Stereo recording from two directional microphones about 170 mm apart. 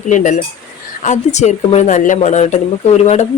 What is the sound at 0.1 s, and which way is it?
Speech, 45° left (ahead or behind).